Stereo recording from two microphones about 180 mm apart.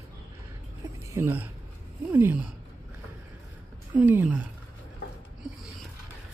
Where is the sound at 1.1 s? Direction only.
10° right (ahead or behind).